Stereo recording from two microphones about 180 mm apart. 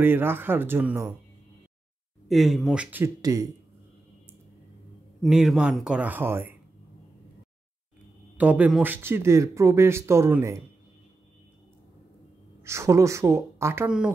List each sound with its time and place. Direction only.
0.0 s speech: 10° right (ahead or behind)
2.2 s speech: centre (ahead or behind)
3.2 s speech: 20° right (ahead or behind)
5.2 s speech: centre (ahead or behind)
8.4 s speech: 10° right (ahead or behind)
12.6 s speech: 15° right (ahead or behind)